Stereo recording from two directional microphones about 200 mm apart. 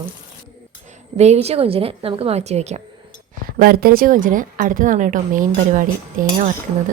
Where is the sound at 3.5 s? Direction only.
50° right (ahead or behind).